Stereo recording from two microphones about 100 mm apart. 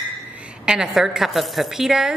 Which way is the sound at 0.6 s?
5° right (ahead or behind).